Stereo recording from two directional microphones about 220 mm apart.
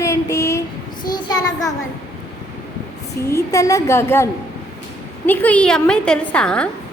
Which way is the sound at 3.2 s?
15° left (ahead or behind).